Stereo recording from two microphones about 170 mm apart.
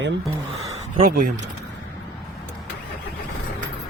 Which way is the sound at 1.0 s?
55° right (ahead or behind).